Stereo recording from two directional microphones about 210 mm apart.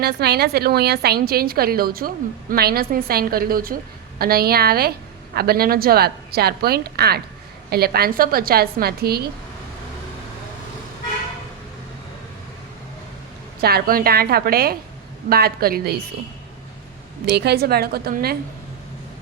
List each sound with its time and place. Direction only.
0.0 s a woman's voice: 50° right (ahead or behind)
13.6 s a woman's voice: 45° right (ahead or behind)
17.2 s a woman's voice: 50° right (ahead or behind)